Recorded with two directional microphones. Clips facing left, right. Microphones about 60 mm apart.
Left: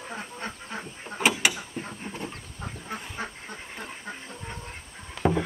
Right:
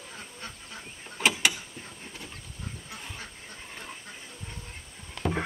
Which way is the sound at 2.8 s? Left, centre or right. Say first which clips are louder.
Left 7 dB; left.